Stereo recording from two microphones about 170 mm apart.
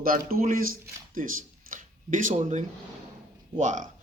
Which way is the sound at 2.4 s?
40° right (ahead or behind).